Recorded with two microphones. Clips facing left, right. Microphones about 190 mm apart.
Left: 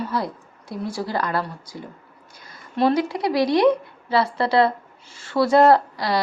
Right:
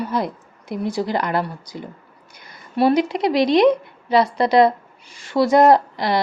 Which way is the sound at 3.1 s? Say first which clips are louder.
Right 3 dB; 20° right (ahead or behind).